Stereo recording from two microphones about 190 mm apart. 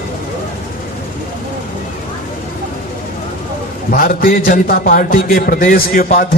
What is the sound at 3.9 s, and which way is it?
A man's voice, 45° left (ahead or behind).